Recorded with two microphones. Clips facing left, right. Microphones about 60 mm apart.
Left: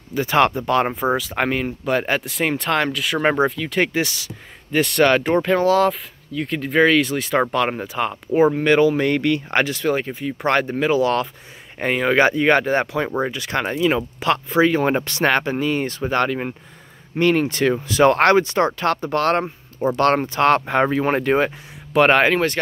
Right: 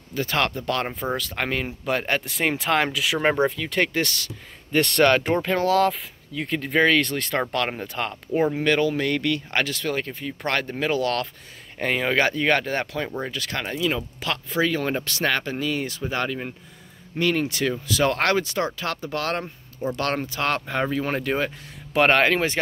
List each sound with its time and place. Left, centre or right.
0.1 s speech: centre
1.6 s speech: centre
13.6 s speech: left
16.0 s speech: left
17.2 s speech: left
18.8 s speech: left
21.9 s speech: centre